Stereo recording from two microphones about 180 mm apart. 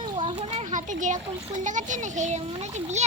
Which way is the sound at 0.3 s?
35° right (ahead or behind).